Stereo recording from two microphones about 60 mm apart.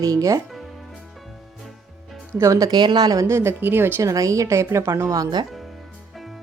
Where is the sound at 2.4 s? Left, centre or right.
Right.